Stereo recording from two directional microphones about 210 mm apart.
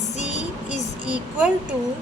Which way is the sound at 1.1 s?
5° right (ahead or behind).